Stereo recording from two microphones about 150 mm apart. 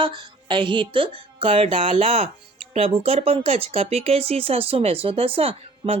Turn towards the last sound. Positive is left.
turn(degrees=-40)  # may be behind; listen again after turning